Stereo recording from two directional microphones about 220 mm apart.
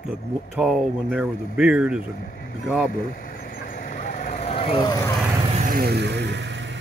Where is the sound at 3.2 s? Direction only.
40° left (ahead or behind); by 5.0 s 20° left (ahead or behind).